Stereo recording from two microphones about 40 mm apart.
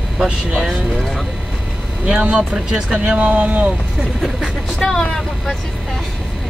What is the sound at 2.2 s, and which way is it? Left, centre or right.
Speech, right.